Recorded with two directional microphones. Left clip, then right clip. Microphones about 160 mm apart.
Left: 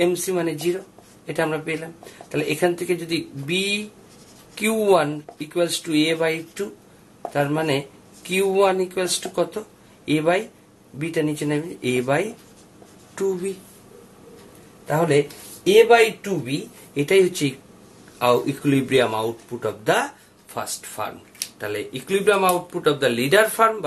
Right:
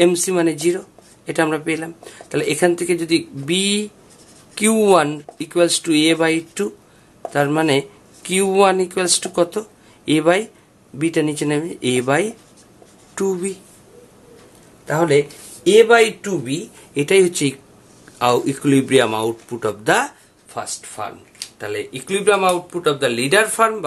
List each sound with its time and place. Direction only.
0.0 s speech: 55° right (ahead or behind)
14.9 s speech: 55° right (ahead or behind)
20.5 s speech: 15° right (ahead or behind); by 23.9 s 35° right (ahead or behind)